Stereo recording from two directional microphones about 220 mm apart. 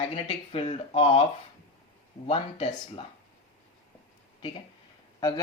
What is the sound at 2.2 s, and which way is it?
Speech, 25° left (ahead or behind).